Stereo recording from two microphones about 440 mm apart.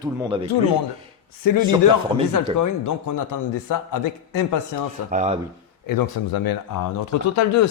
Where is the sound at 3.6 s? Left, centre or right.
Left.